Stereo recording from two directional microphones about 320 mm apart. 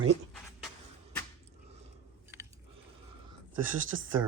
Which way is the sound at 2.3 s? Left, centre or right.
Centre.